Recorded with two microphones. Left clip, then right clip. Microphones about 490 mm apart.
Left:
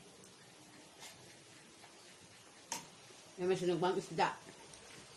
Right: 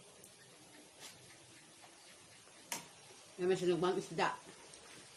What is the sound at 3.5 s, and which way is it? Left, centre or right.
Speech, left.